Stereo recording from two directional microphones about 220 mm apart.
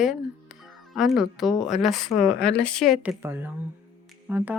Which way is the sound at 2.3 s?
50° left (ahead or behind).